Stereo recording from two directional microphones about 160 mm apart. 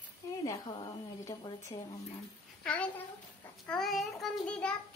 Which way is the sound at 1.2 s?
25° left (ahead or behind).